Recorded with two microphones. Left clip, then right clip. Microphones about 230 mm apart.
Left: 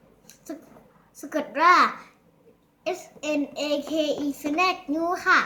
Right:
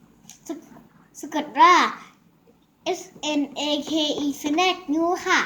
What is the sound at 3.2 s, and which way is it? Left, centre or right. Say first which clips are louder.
A child's voice: even; left.